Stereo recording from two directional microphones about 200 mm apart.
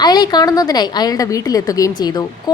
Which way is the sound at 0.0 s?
20° left (ahead or behind).